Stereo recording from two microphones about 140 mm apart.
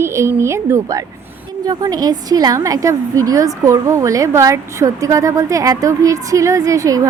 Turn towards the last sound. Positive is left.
turn(degrees=-25)  # may be behind; listen again after turning